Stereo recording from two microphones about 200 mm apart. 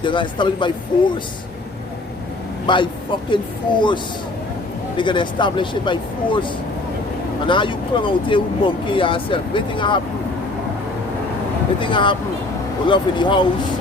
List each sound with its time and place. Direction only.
0.0 s speech: 25° left (ahead or behind)
2.7 s speech: 25° left (ahead or behind)
11.8 s speech: 25° left (ahead or behind)